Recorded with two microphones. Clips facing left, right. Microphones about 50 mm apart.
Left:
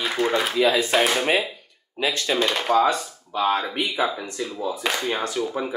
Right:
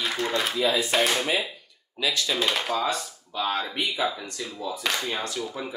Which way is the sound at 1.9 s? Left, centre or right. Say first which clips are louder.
Left 3 dB; left.